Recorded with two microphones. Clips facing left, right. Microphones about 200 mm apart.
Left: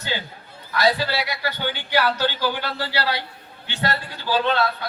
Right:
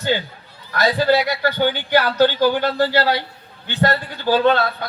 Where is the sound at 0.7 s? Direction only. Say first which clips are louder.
Right 5 dB; 50° right (ahead or behind).